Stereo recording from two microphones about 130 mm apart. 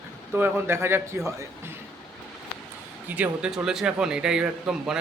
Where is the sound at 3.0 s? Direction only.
10° right (ahead or behind).